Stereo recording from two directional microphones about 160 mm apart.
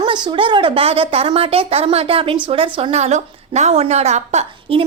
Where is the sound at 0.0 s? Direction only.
30° right (ahead or behind).